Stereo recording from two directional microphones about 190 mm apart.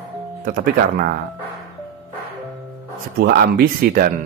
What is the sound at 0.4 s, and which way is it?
Speech, 50° right (ahead or behind).